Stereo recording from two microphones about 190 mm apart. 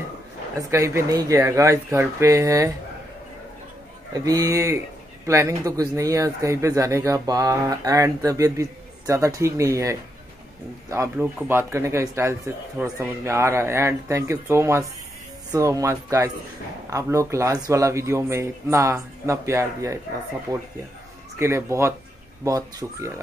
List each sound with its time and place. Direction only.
0.6 s speech: 15° right (ahead or behind)
4.2 s speech: 20° right (ahead or behind)